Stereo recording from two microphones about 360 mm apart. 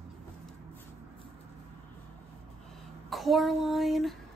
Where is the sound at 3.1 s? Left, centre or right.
Centre.